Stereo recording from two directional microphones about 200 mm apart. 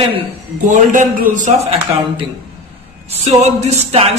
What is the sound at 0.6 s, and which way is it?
A woman's voice, 40° right (ahead or behind).